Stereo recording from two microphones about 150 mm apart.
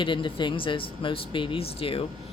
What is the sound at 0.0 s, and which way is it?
Speech, 35° left (ahead or behind).